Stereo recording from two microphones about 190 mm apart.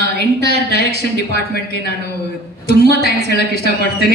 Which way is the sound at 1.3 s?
55° left (ahead or behind).